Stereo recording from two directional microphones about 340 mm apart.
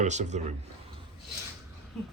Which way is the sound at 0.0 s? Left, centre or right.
Right.